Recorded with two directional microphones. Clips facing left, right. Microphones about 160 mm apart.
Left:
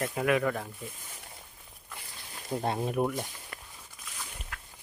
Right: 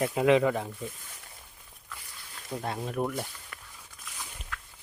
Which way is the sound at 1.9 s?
25° left (ahead or behind).